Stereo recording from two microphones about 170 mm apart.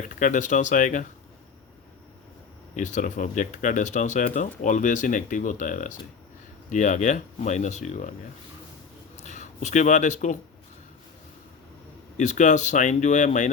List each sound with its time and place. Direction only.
0.1 s speech: 50° left (ahead or behind)
2.7 s speech: 45° left (ahead or behind)
9.1 s speech: 45° left (ahead or behind)
12.1 s speech: 45° left (ahead or behind)